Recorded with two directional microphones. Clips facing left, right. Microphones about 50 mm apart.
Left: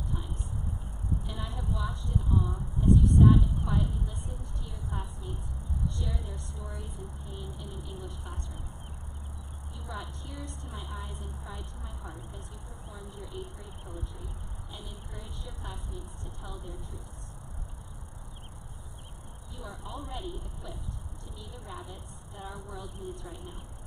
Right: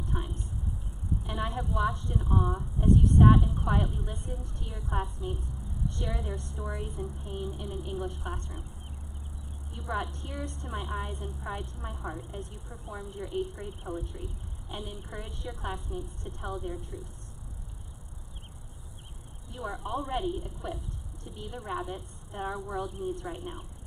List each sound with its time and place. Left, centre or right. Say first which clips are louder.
0.1 s vehicle: right 5 dB; right
1.3 s a woman's voice: right 5 dB; right
9.9 s a woman's voice: right 8 dB; right
19.5 s a woman's voice: right 8 dB; right